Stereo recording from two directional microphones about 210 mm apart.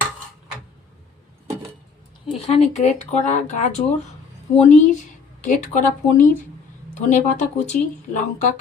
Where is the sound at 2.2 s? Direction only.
30° left (ahead or behind).